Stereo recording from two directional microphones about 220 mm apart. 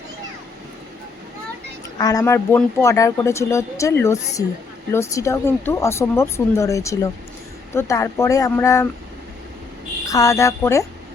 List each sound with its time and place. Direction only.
2.0 s speech: 15° left (ahead or behind)
10.1 s speech: 15° left (ahead or behind)